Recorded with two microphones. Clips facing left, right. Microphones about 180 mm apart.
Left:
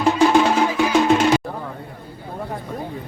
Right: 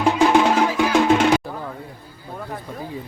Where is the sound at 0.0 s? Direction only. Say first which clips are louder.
Left 1 dB; 15° right (ahead or behind).